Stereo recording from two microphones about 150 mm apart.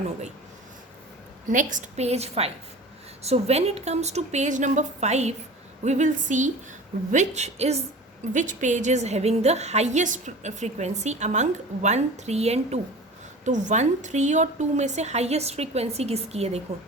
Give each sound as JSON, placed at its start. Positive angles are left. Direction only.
{"t": 1.5, "sound": "a woman's voice", "side_deg": -60}
{"t": 8.3, "sound": "a woman's voice", "side_deg": -55}